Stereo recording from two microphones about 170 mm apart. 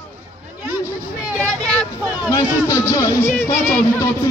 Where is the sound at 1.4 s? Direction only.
5° left (ahead or behind).